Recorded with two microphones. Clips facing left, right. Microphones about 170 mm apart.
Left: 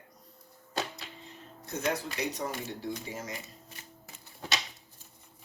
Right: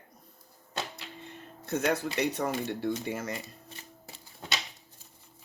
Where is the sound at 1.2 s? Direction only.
60° right (ahead or behind).